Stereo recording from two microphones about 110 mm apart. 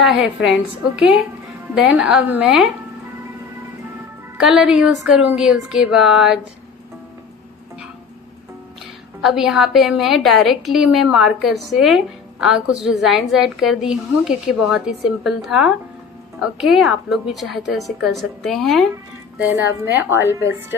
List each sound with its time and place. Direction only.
0.0 s a woman's voice: 5° right (ahead or behind)
4.4 s a woman's voice: 5° right (ahead or behind)
9.2 s a woman's voice: 5° right (ahead or behind)
19.8 s a woman's voice: 20° right (ahead or behind)